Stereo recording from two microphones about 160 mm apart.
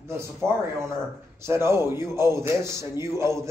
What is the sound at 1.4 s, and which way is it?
A man's voice, 15° right (ahead or behind).